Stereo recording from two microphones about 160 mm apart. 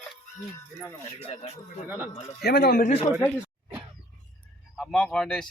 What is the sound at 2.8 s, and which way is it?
Speech, 40° left (ahead or behind).